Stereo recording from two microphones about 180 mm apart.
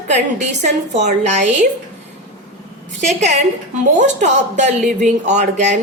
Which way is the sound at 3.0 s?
40° right (ahead or behind).